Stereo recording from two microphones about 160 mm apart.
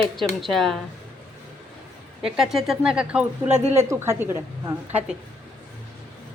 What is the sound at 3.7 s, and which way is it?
A woman's voice, 15° right (ahead or behind).